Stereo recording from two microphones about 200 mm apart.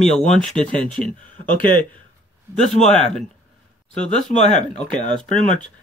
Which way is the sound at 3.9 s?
35° left (ahead or behind).